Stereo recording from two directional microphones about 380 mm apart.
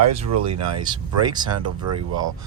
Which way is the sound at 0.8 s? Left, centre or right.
Centre.